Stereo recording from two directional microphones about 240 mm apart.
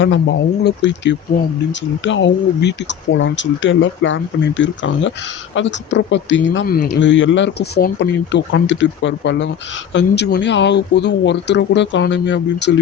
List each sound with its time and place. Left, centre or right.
0.0 s speech: left